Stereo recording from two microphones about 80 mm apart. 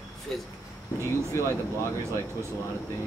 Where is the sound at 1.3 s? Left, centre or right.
Left.